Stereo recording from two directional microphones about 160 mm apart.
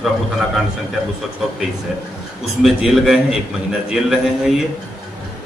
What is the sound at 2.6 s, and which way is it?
A man's voice, 5° right (ahead or behind).